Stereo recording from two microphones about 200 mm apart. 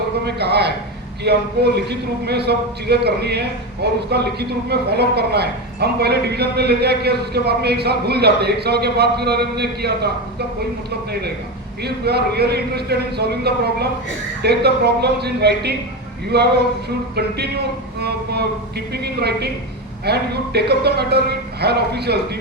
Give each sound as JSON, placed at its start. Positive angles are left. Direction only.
{"t": 0.3, "sound": "speech", "side_deg": -55}
{"t": 11.8, "sound": "a man's voice", "side_deg": -55}